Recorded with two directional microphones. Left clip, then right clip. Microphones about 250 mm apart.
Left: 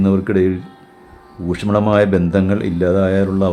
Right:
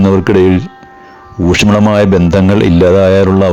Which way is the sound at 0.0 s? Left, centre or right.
Right.